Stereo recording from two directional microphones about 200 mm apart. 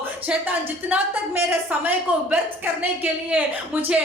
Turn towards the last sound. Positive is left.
turn(degrees=-5)  # may be behind; listen again after turning